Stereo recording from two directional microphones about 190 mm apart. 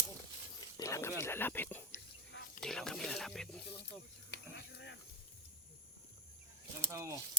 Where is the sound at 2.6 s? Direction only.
5° left (ahead or behind).